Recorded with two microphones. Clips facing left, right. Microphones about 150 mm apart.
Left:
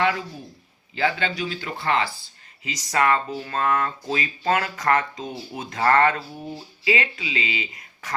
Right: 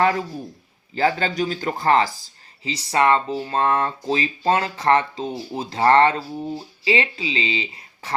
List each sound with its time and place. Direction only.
0.0 s a man's voice: 40° right (ahead or behind)